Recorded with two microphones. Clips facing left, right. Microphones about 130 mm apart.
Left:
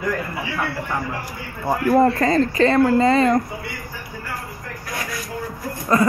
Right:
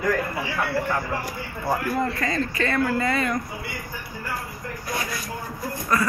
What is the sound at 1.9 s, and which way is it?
Speech, 40° left (ahead or behind).